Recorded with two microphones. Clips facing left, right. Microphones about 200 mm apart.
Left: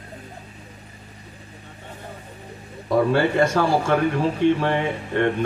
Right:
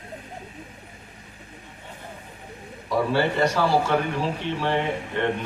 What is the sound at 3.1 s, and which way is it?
A man's voice, 50° left (ahead or behind).